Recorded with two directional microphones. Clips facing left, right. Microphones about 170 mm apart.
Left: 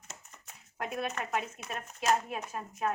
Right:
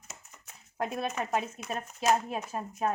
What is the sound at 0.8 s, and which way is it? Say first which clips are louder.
Speech: right 3 dB; 35° right (ahead or behind).